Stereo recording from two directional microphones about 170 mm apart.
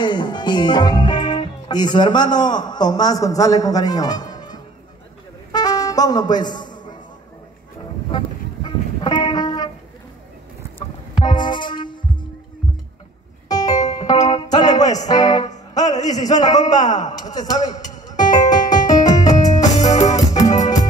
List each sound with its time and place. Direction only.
0.0 s speech: 25° left (ahead or behind)
5.5 s music: 25° left (ahead or behind)
8.6 s music: 25° left (ahead or behind)
10.8 s music: 25° left (ahead or behind)
13.5 s music: 20° left (ahead or behind)
16.1 s a sound: 25° left (ahead or behind)
16.9 s speech: 25° left (ahead or behind)
18.5 s music: 25° left (ahead or behind)